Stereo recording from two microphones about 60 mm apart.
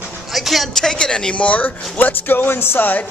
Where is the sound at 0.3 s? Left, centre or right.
Centre; by 3.1 s left.